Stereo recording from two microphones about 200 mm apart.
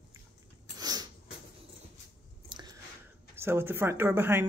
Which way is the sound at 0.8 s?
20° right (ahead or behind).